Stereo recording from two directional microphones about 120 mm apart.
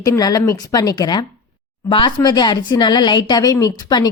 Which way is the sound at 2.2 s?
35° left (ahead or behind).